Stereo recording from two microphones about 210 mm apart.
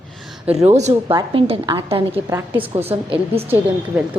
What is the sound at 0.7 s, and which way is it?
A woman's voice, 30° right (ahead or behind).